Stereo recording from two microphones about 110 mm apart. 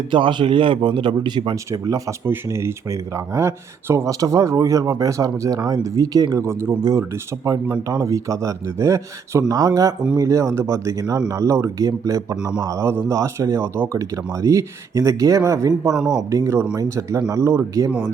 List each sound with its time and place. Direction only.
0.1 s speech: 45° right (ahead or behind)
2.2 s speech: 20° right (ahead or behind)
6.4 s a man's voice: 25° right (ahead or behind)
15.9 s speech: 5° right (ahead or behind)
16.3 s speech: 25° right (ahead or behind)